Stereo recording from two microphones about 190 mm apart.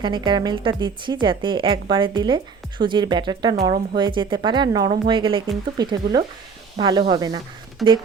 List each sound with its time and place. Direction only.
0.0 s a woman's voice: 25° right (ahead or behind)
7.8 s speech: centre (ahead or behind)